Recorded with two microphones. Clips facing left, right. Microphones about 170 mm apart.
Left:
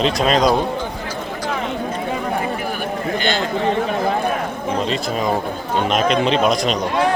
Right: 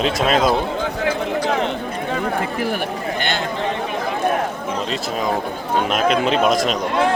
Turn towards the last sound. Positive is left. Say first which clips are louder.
# even
turn(degrees=-5)  # may be behind; listen again after turning